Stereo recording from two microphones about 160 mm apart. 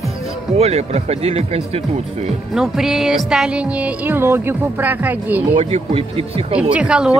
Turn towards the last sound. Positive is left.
turn(degrees=-5)  # may be behind; listen again after turning